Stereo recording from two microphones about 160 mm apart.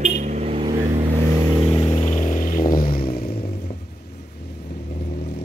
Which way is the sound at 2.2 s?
55° left (ahead or behind).